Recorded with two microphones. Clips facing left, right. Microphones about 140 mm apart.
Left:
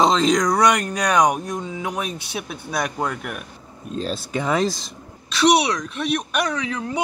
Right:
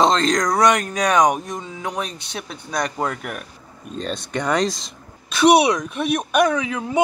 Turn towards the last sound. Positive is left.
turn(degrees=-5)  # may be behind; listen again after turning